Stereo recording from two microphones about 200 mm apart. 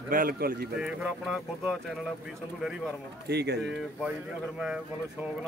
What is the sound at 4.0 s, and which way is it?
Speech, 5° right (ahead or behind).